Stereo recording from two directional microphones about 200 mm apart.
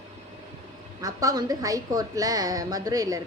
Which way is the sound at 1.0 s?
20° right (ahead or behind).